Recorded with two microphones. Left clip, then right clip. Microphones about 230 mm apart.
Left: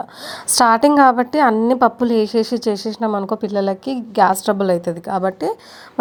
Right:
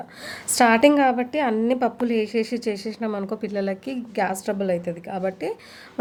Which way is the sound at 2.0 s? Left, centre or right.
Centre.